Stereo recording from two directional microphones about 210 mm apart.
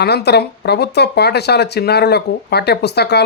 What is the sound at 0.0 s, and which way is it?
Speech, 50° left (ahead or behind).